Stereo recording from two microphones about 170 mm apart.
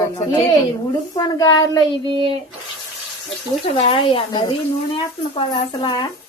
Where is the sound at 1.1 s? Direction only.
25° left (ahead or behind).